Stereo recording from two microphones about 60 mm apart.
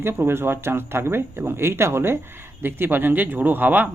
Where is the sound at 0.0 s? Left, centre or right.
Right.